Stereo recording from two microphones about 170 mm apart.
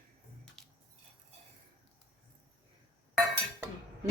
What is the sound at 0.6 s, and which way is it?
Squish, 5° left (ahead or behind).